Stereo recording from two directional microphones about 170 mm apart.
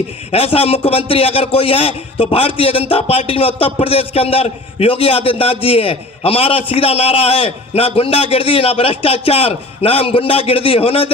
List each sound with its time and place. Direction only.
0.3 s a man's voice: 35° left (ahead or behind)